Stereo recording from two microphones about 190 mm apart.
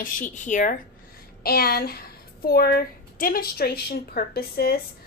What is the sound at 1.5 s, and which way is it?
A woman's voice, 55° left (ahead or behind).